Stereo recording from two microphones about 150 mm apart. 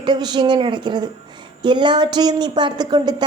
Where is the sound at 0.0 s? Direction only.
30° right (ahead or behind).